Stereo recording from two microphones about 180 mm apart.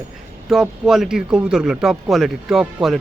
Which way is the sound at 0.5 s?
Centre (ahead or behind).